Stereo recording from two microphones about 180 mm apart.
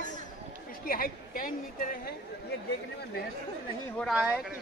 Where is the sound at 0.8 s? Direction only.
55° left (ahead or behind).